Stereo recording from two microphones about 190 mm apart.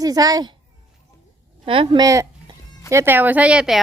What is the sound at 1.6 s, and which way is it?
A woman's voice, 30° right (ahead or behind).